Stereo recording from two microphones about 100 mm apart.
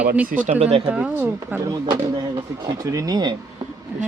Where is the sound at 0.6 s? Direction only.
90° right.